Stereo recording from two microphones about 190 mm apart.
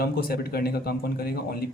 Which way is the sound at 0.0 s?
55° left (ahead or behind).